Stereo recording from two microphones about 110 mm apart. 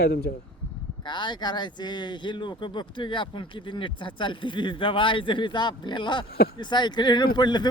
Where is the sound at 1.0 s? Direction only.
45° left (ahead or behind).